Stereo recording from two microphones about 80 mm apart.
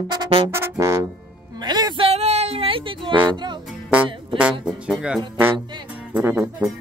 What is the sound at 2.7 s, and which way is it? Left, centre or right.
Speech, right.